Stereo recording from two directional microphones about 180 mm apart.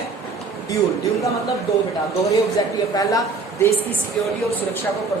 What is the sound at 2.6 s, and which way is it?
A woman's voice, 20° left (ahead or behind).